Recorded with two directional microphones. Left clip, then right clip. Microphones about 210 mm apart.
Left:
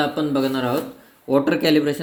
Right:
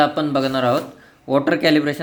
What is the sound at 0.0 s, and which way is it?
Speech, 25° right (ahead or behind).